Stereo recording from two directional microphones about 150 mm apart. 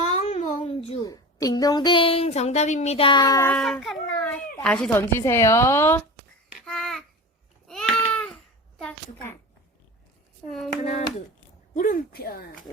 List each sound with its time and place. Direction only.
0.0 s a sound: 50° left (ahead or behind)
1.0 s a woman's voice: 25° left (ahead or behind)
3.5 s a child's voice: 5° left (ahead or behind)
6.7 s babbling: 5° left (ahead or behind)
7.7 s a sound: 5° left (ahead or behind)
8.8 s a child's voice: 10° left (ahead or behind)
11.7 s speech: 60° left (ahead or behind); by 12.6 s 90° left